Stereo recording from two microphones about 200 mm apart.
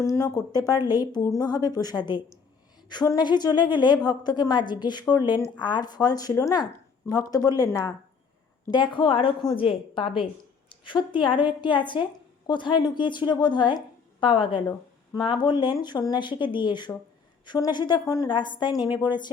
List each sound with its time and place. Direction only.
0.0 s a woman's voice: 15° left (ahead or behind)